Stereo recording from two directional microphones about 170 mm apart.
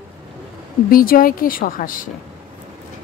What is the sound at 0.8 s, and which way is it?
A woman's voice, 55° left (ahead or behind).